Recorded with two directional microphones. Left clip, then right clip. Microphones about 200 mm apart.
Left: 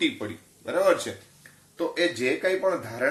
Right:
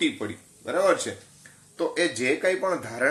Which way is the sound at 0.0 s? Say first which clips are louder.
Even; 25° right (ahead or behind).